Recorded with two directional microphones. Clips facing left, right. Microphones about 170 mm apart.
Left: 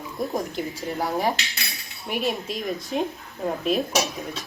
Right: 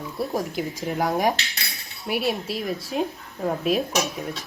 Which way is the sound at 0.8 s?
15° right (ahead or behind).